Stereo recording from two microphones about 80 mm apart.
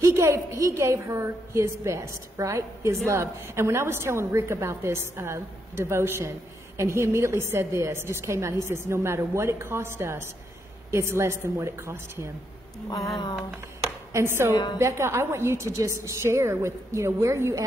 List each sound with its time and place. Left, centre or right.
0.0 s a woman's voice: right
14.1 s a woman's voice: right